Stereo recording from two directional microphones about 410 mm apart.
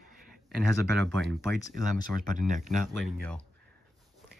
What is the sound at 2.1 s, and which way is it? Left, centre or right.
Speech, centre.